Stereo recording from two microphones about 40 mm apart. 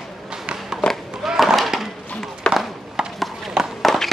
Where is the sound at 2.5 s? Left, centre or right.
Left.